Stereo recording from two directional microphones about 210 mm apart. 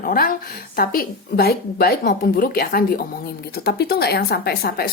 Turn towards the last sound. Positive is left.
turn(degrees=45)  # may be behind; listen again after turning